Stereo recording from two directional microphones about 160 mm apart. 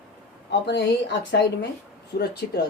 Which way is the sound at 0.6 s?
90° left.